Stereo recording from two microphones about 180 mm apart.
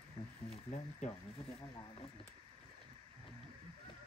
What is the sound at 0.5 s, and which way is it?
Speech, 40° left (ahead or behind).